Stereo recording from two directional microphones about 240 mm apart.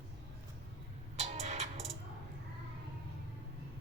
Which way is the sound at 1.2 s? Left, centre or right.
Right.